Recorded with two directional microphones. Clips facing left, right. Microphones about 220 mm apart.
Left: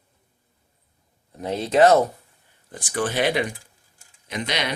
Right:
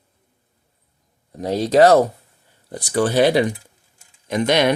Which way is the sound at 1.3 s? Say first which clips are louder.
Right 5 dB; 40° right (ahead or behind).